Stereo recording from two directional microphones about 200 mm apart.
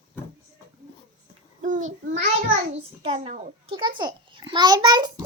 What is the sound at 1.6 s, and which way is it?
A child's voice, 40° right (ahead or behind).